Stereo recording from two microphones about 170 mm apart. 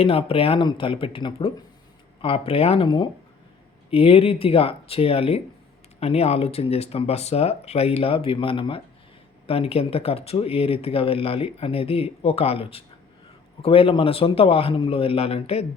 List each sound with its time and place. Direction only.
0.0 s speech: 35° left (ahead or behind)